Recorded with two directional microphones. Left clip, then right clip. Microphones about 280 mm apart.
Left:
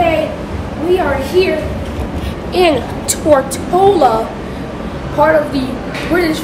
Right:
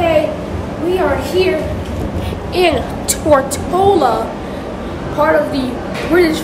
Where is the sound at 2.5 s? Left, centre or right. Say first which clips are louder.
Left 2 dB; centre.